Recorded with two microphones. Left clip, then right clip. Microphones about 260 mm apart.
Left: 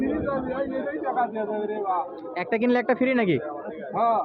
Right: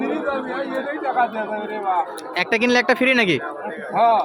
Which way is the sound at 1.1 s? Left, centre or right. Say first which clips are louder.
Right 6 dB; centre.